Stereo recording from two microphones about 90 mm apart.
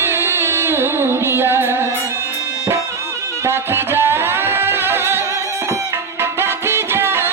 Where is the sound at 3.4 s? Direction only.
25° right (ahead or behind).